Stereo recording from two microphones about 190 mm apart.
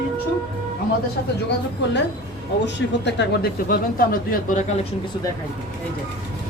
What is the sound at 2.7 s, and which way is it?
Speech, 65° left (ahead or behind).